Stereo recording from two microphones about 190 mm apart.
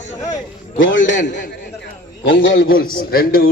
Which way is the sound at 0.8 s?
75° left (ahead or behind).